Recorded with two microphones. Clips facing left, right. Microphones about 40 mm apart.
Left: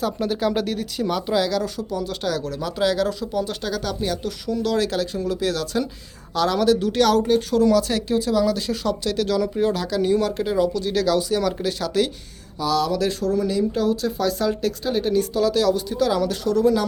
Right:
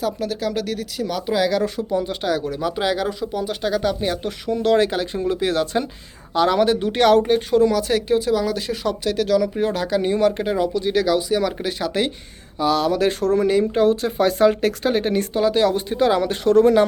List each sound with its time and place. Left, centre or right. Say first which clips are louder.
0.0 s speech: left 1 dB; centre
1.4 s speech: right 3 dB; centre
9.6 s speech: right 1 dB; right